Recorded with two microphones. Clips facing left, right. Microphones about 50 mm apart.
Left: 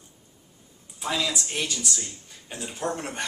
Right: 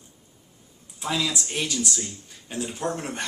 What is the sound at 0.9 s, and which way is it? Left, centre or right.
Speech, centre.